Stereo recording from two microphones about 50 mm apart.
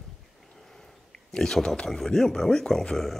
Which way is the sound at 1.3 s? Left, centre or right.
Centre.